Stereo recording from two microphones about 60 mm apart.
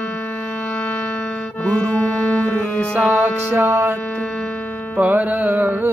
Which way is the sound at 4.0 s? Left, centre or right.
Left.